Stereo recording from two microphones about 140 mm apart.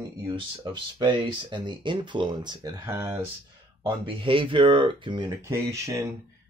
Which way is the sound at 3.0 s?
20° right (ahead or behind).